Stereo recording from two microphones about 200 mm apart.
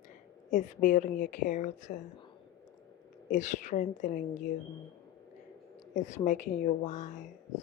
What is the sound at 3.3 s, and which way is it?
Speech, 40° left (ahead or behind).